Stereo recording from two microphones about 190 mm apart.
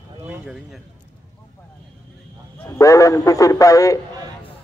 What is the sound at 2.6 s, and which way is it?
A man's voice, 15° left (ahead or behind).